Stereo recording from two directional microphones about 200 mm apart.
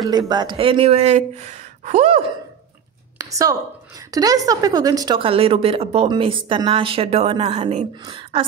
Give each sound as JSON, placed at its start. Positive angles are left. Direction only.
{"t": 0.3, "sound": "speech", "side_deg": -20}
{"t": 3.2, "sound": "a sound", "side_deg": -15}
{"t": 4.1, "sound": "a woman's voice", "side_deg": -15}